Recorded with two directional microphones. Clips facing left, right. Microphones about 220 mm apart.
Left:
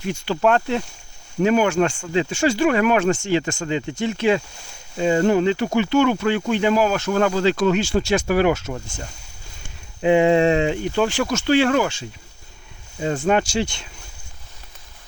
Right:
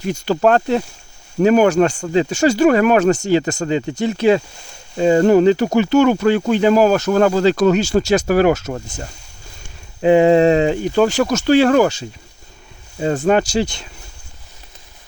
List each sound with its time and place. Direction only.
0.0 s speech: 40° right (ahead or behind)
13.2 s speech: 40° right (ahead or behind)